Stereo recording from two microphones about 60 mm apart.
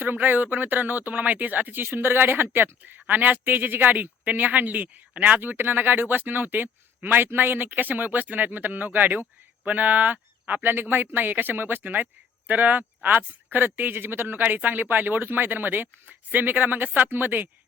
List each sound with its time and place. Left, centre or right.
0.0 s speech: right